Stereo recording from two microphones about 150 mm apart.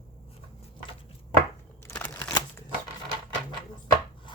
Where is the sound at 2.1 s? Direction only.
25° left (ahead or behind).